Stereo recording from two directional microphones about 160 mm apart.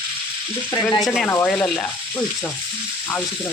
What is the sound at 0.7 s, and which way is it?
Speech, 25° left (ahead or behind).